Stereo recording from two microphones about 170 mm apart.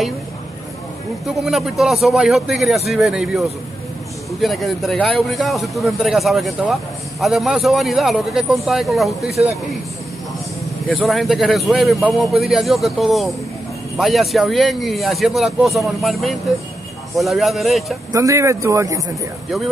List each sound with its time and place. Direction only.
1.2 s speech: centre (ahead or behind)
10.9 s speech: centre (ahead or behind)
18.1 s speech: 20° right (ahead or behind)